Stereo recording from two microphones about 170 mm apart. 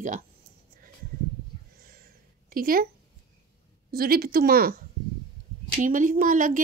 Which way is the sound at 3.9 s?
60° right (ahead or behind).